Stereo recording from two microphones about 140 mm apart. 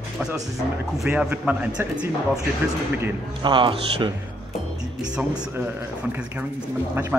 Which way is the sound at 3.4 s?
35° right (ahead or behind).